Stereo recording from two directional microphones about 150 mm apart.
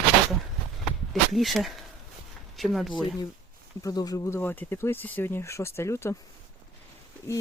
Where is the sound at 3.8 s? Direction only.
25° left (ahead or behind).